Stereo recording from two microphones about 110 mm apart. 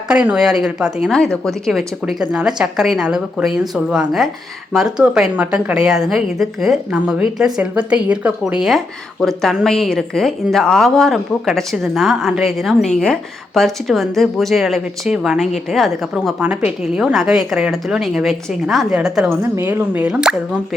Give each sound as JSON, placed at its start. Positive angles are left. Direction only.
{"t": 0.1, "sound": "a woman's voice", "side_deg": -10}
{"t": 9.2, "sound": "a woman's voice", "side_deg": 0}
{"t": 19.4, "sound": "a woman's voice", "side_deg": -20}